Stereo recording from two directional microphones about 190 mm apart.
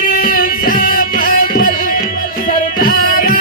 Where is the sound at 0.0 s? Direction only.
50° left (ahead or behind).